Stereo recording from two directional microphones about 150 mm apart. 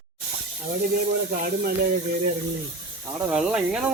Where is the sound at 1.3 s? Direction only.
75° right (ahead or behind).